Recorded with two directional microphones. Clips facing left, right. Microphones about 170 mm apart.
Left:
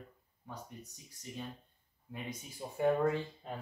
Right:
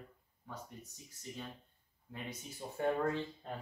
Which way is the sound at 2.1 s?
15° left (ahead or behind).